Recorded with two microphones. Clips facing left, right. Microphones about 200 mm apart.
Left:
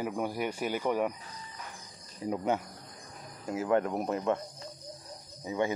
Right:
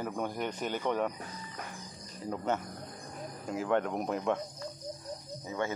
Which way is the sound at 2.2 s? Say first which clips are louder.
Left 4 dB; 15° left (ahead or behind).